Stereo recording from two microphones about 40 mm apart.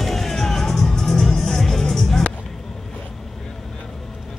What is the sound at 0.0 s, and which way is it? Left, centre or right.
Music, centre.